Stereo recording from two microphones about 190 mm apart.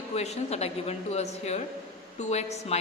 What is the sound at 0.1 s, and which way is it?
A man's voice, 35° left (ahead or behind).